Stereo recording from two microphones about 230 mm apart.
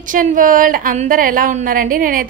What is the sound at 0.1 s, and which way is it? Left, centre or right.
A woman's voice, right.